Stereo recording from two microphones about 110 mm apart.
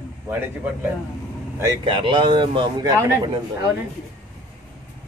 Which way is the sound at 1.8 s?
50° right (ahead or behind).